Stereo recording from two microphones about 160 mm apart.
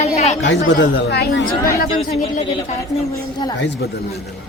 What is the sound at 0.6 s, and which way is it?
Speech, 80° left.